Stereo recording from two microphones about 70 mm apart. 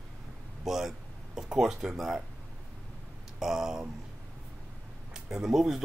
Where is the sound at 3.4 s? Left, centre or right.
Centre.